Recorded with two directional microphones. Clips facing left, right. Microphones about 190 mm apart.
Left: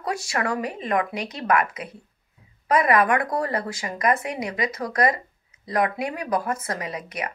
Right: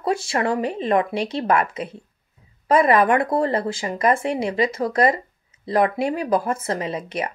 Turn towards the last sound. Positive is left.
turn(degrees=-25)  # may be behind; listen again after turning